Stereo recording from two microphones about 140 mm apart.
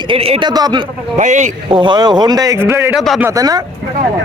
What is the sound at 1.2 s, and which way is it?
Speech, 60° right (ahead or behind).